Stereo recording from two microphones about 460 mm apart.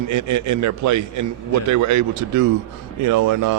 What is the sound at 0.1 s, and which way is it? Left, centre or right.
A man's voice, right.